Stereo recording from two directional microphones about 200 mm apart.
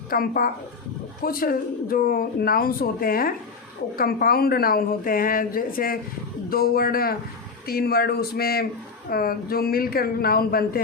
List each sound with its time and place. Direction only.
0.1 s speech: 45° left (ahead or behind)